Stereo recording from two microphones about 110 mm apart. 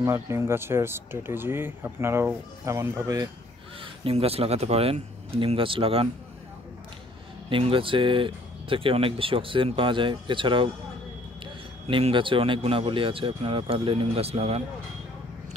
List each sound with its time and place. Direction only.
0.0 s speech: 25° right (ahead or behind)
3.8 s speech: 60° right (ahead or behind)
7.4 s speech: 55° right (ahead or behind)
11.9 s speech: 50° right (ahead or behind); by 14.6 s 65° right (ahead or behind)